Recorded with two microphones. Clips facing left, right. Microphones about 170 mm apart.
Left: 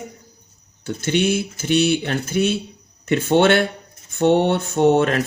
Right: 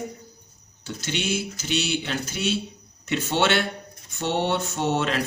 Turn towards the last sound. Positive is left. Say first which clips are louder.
# left 9 dB
turn(degrees=55)  # may be behind; listen again after turning